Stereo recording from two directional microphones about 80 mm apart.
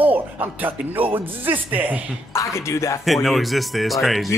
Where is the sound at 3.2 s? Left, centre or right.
Centre.